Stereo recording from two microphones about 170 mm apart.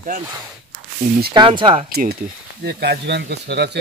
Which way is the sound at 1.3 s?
30° right (ahead or behind).